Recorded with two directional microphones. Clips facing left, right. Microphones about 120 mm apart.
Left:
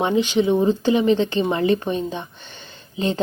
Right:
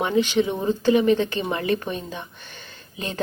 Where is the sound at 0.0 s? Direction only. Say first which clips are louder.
Left 2 dB; 20° left (ahead or behind).